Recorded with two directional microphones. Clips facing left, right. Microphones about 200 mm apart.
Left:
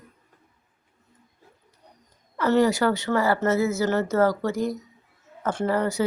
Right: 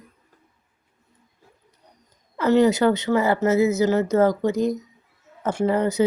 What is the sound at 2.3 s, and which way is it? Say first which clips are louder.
A woman's voice: right 3 dB; 20° right (ahead or behind).